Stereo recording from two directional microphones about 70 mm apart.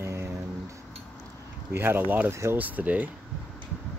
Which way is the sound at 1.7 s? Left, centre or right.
Right.